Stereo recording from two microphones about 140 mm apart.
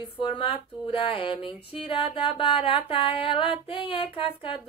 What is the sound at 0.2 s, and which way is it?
Mantra, 35° left (ahead or behind).